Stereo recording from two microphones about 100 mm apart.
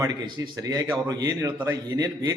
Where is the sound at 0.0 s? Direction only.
40° right (ahead or behind).